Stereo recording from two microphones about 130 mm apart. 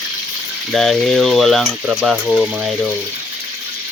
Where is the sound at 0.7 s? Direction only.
Centre (ahead or behind).